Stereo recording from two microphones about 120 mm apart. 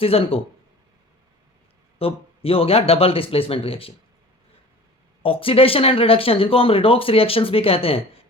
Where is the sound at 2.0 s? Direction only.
50° left (ahead or behind).